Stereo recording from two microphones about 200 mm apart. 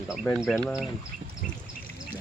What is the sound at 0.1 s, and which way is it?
Speech, centre (ahead or behind).